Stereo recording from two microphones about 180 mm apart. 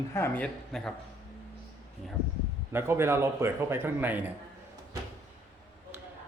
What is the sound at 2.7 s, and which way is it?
Speech, 15° right (ahead or behind).